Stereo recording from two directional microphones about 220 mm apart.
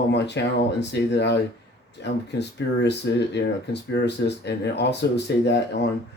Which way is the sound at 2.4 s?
50° left (ahead or behind).